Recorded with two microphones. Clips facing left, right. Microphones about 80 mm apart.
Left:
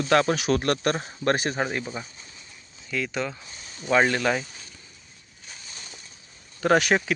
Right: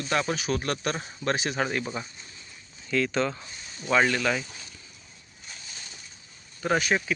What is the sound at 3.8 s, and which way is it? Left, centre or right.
Speech, left.